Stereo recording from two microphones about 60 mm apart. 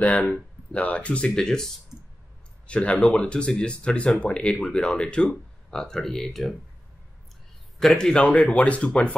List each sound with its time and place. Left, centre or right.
0.0 s speech: left
2.6 s speech: centre
7.8 s speech: centre